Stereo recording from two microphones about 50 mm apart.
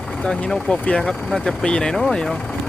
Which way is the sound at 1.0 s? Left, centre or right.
Centre.